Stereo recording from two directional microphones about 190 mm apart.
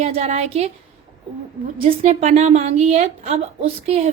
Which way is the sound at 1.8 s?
30° right (ahead or behind).